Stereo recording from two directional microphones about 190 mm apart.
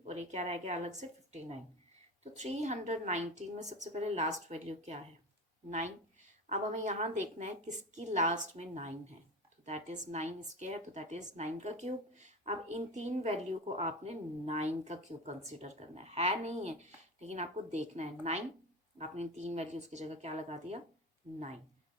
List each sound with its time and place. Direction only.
0.0 s a woman's voice: 35° right (ahead or behind)
6.5 s speech: 40° right (ahead or behind)